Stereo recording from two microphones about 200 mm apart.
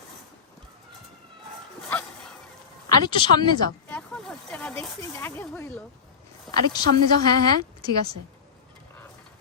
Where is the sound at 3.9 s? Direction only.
5° left (ahead or behind).